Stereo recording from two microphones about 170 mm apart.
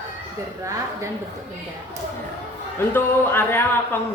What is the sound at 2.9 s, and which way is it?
A man's voice, 15° left (ahead or behind).